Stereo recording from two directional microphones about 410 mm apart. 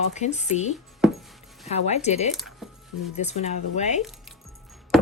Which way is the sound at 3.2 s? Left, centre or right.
Centre.